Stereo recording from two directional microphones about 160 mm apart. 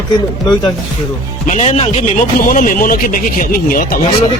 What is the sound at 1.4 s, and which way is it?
Speech, 45° left (ahead or behind).